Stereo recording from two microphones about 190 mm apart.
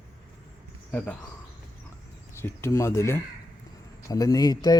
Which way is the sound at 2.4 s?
15° left (ahead or behind).